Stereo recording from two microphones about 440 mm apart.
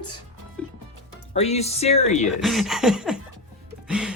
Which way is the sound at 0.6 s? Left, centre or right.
Centre.